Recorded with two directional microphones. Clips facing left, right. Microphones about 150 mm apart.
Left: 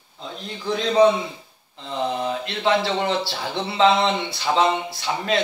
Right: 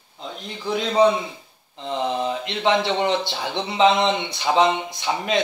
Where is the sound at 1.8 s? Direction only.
20° right (ahead or behind).